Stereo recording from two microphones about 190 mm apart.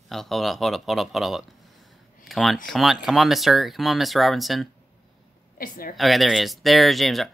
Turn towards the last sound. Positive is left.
turn(degrees=0)  # may be behind; listen again after turning